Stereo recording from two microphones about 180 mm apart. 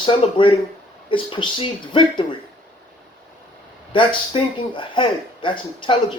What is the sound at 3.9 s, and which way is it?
Speech, 30° left (ahead or behind).